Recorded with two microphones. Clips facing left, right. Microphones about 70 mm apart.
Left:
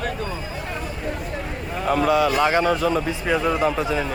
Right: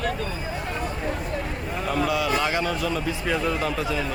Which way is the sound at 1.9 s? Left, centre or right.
Left.